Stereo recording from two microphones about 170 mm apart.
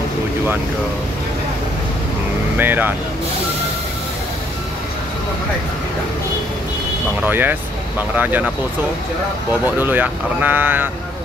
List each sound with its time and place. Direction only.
2.5 s speech: 10° right (ahead or behind)
7.2 s speech: 10° right (ahead or behind)
9.8 s speech: 10° right (ahead or behind)